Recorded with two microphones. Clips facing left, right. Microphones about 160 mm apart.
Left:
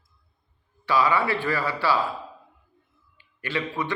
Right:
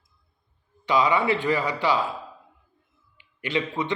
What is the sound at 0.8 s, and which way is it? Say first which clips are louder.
Speech: right 1 dB; 20° right (ahead or behind).